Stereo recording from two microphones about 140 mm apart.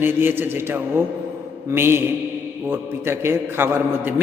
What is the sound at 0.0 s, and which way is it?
A woman's voice, 15° right (ahead or behind).